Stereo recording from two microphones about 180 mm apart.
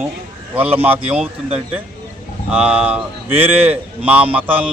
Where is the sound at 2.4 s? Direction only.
5° right (ahead or behind).